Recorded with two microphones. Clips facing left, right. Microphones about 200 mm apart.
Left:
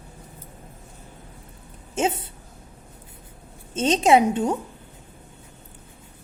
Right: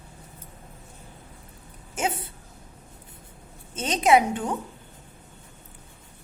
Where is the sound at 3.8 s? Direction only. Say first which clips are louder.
Left 3 dB; 25° left (ahead or behind).